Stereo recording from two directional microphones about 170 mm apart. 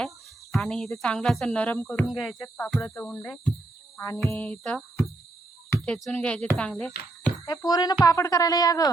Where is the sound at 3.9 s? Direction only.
15° left (ahead or behind).